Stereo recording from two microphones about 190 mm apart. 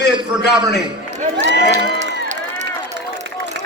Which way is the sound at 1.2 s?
40° right (ahead or behind).